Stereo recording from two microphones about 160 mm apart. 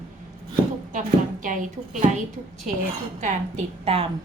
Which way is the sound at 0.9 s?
55° right (ahead or behind).